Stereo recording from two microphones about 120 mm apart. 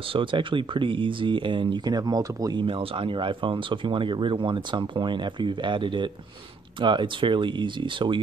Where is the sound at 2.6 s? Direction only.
45° right (ahead or behind).